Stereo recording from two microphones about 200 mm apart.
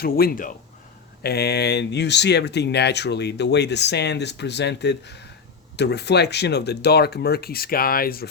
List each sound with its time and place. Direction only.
0.0 s speech: 50° left (ahead or behind)